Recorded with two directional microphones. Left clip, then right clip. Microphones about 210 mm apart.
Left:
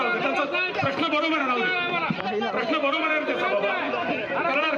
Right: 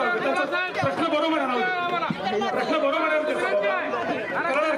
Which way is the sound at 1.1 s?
55° right (ahead or behind).